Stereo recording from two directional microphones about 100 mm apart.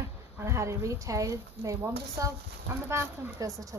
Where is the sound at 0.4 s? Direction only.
30° right (ahead or behind).